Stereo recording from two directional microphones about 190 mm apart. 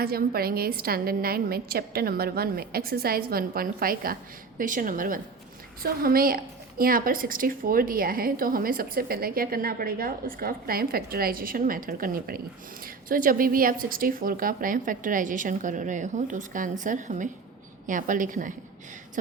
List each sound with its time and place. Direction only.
0.0 s a woman's voice: 50° right (ahead or behind)